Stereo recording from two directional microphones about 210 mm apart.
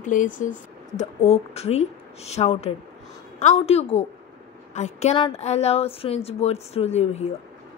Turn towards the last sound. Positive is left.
turn(degrees=30)  # may be behind; listen again after turning